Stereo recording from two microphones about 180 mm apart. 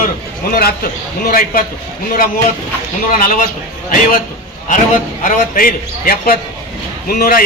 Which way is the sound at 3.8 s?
50° left (ahead or behind).